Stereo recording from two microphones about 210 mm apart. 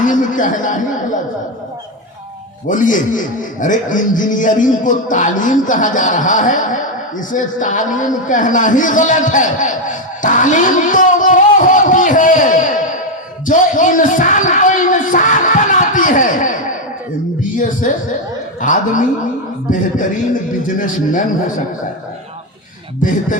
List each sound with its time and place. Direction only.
0.0 s a sound: 40° left (ahead or behind)
2.6 s a man's voice: 40° left (ahead or behind)
13.5 s a sound: 40° left (ahead or behind)
17.6 s a man's voice: 40° left (ahead or behind)
20.7 s a man's voice: 40° left (ahead or behind)
23.0 s a man's voice: 40° left (ahead or behind)